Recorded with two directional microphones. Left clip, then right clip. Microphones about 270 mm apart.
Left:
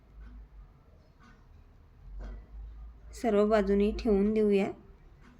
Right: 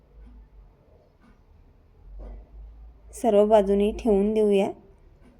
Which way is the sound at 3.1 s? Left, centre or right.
Centre.